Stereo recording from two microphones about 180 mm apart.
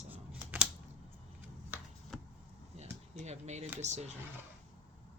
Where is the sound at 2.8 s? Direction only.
40° right (ahead or behind).